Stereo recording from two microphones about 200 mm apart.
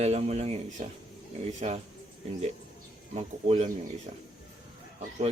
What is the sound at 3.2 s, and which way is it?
Speech, 30° right (ahead or behind).